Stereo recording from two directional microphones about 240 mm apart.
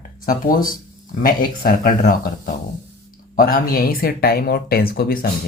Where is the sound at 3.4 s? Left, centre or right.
Left.